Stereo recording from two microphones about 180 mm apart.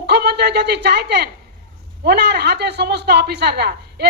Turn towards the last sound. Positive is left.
turn(degrees=-65)  # may be behind; listen again after turning